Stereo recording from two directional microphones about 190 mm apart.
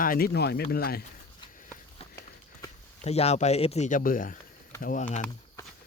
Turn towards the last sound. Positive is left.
turn(degrees=40)  # may be behind; listen again after turning